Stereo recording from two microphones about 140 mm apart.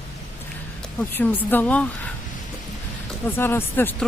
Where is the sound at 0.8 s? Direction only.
10° left (ahead or behind).